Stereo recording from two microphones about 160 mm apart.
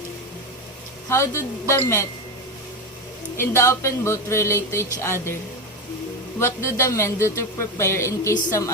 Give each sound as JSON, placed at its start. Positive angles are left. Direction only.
{"t": 1.1, "sound": "speech", "side_deg": 15}
{"t": 3.3, "sound": "speech", "side_deg": 15}
{"t": 6.4, "sound": "speech", "side_deg": 15}